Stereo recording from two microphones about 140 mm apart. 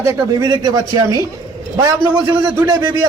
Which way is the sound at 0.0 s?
20° right (ahead or behind).